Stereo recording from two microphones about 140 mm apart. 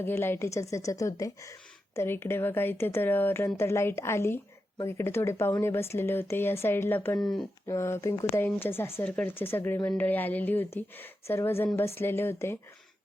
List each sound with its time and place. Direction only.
0.0 s a woman's voice: 15° left (ahead or behind)
7.2 s speech: 5° left (ahead or behind)
7.7 s a woman's voice: 20° left (ahead or behind)